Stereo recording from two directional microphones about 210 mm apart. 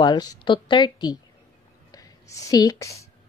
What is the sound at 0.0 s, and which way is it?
A woman's voice, 20° left (ahead or behind).